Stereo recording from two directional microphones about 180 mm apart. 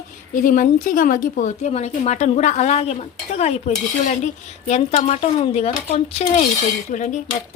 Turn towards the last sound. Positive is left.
turn(degrees=45)  # may be behind; listen again after turning